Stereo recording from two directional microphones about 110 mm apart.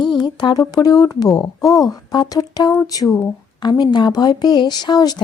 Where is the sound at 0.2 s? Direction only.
40° left (ahead or behind).